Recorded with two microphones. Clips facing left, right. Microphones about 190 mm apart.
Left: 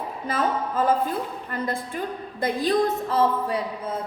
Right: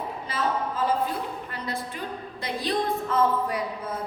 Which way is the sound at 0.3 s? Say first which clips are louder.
Left 3 dB; 50° left (ahead or behind).